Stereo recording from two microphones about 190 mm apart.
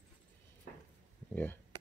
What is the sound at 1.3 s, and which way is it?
Speech, 10° left (ahead or behind).